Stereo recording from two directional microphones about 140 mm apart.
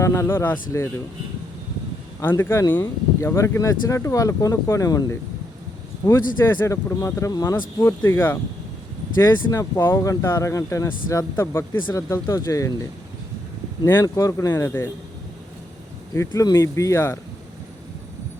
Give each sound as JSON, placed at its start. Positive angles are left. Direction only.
{"t": 0.0, "sound": "speech", "side_deg": 20}
{"t": 2.3, "sound": "speech", "side_deg": 20}
{"t": 6.0, "sound": "speech", "side_deg": 35}
{"t": 6.5, "sound": "speech", "side_deg": 20}
{"t": 13.8, "sound": "speech", "side_deg": 20}
{"t": 16.1, "sound": "speech", "side_deg": 20}